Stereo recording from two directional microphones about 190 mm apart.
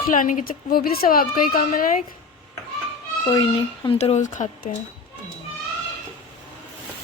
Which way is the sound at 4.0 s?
35° left (ahead or behind).